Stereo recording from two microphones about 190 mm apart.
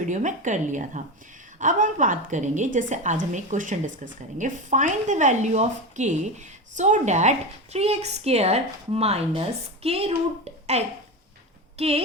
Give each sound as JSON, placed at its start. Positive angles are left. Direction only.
{"t": 0.0, "sound": "a woman's voice", "side_deg": -40}